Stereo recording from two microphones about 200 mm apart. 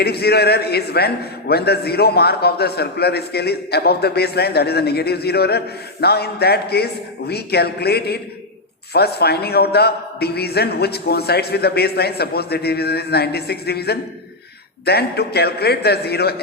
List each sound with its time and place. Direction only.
0.0 s a man's voice: 55° left (ahead or behind)